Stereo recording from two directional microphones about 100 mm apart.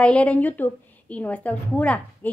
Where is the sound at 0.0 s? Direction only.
10° left (ahead or behind).